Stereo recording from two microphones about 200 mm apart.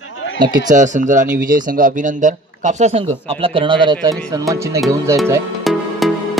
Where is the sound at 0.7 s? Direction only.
40° right (ahead or behind); by 4.8 s 15° right (ahead or behind).